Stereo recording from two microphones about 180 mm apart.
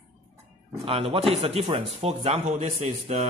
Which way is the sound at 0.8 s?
30° right (ahead or behind).